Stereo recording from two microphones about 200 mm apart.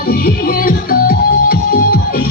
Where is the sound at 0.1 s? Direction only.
50° left (ahead or behind).